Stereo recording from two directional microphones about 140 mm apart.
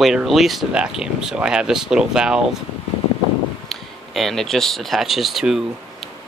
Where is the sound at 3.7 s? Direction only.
Centre (ahead or behind).